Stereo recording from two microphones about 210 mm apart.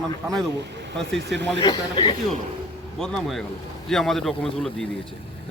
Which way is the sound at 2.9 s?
5° left (ahead or behind).